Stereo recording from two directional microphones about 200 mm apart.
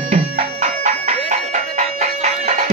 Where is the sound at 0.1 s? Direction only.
35° right (ahead or behind).